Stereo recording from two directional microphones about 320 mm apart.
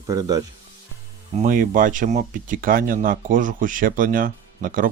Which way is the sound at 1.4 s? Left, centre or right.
Right.